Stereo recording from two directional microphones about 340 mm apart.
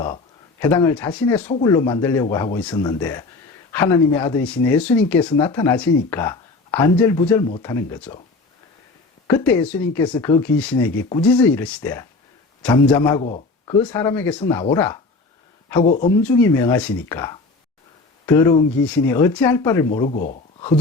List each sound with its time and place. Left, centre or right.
0.6 s speech: centre
9.2 s speech: centre
13.2 s speech: centre
13.8 s speech: centre
16.2 s speech: centre
20.1 s speech: left